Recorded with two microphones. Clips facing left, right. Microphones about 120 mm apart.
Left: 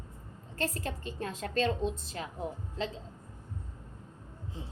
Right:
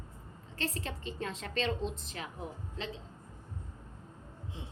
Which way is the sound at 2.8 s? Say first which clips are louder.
Left 5 dB; 35° left (ahead or behind).